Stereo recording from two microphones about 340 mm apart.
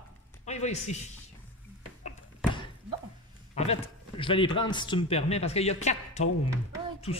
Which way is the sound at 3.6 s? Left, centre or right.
Centre.